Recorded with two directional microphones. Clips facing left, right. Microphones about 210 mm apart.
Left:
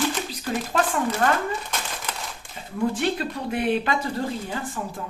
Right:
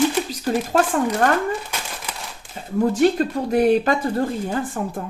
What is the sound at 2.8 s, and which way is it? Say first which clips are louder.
Speech: right 7 dB; 40° right (ahead or behind).